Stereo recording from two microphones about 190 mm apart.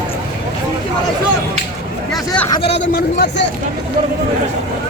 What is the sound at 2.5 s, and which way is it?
Speech, 30° left (ahead or behind).